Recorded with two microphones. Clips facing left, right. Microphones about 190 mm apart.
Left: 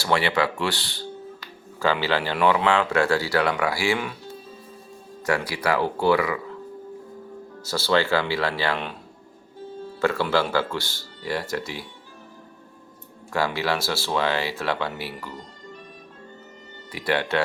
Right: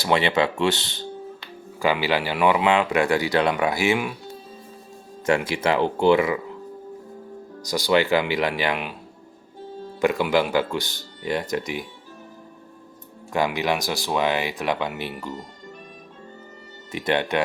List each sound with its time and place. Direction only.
0.0 s speech: 20° right (ahead or behind)
5.2 s speech: 25° right (ahead or behind)
7.6 s speech: 15° right (ahead or behind)
10.0 s speech: 15° right (ahead or behind)
13.3 s speech: 20° right (ahead or behind)
16.9 s speech: 20° right (ahead or behind)